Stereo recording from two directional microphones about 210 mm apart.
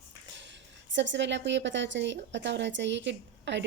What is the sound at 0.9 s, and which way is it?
A woman's voice, 60° right (ahead or behind).